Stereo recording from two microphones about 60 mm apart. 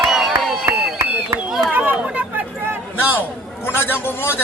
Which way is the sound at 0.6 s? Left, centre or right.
Right.